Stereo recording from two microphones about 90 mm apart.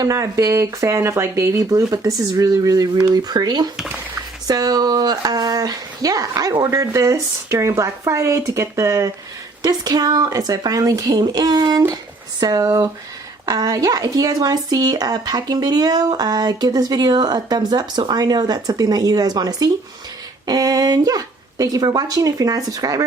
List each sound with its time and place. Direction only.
0.0 s speech: 40° right (ahead or behind)